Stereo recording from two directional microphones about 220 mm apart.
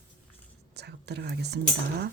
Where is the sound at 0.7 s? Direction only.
50° right (ahead or behind).